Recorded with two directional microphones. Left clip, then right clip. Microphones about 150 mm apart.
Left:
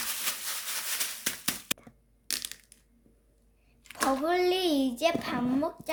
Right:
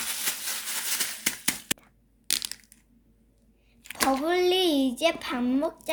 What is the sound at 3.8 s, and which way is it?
A child's voice, 45° right (ahead or behind).